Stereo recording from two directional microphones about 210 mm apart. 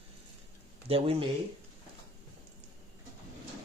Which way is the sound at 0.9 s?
25° right (ahead or behind).